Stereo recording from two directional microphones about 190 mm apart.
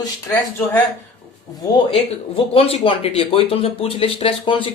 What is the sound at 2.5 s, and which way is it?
Speech, 30° left (ahead or behind).